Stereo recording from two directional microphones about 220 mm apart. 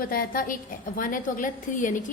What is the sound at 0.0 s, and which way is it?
A woman's voice, 40° left (ahead or behind).